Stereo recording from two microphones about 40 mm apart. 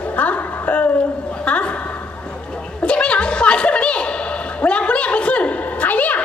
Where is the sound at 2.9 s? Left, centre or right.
Left.